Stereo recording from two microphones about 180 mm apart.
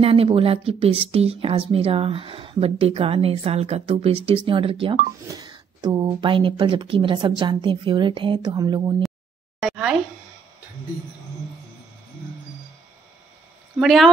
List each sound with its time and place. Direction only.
0.0 s a woman's voice: 30° right (ahead or behind)
9.6 s a sound: centre (ahead or behind)
13.7 s speech: centre (ahead or behind)